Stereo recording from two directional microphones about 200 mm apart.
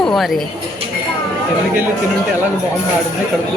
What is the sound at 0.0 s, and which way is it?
Speech, centre (ahead or behind).